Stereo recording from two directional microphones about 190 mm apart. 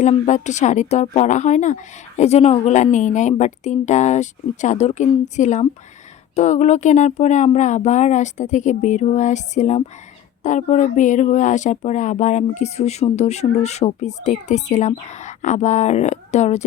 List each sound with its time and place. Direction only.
0.0 s speech: 40° left (ahead or behind)